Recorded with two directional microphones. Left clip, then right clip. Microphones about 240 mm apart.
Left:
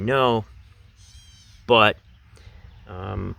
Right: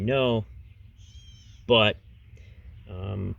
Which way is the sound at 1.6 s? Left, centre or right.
Centre.